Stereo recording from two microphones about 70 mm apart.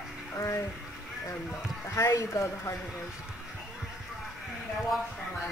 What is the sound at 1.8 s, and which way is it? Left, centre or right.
Speech, left.